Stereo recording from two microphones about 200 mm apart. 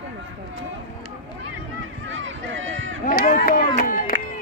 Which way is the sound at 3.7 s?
45° left (ahead or behind).